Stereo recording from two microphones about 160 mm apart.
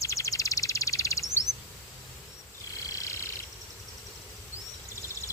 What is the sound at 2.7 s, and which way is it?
Wild animals, 20° left (ahead or behind).